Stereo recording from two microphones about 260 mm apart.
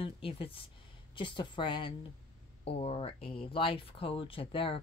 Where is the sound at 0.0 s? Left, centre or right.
Left.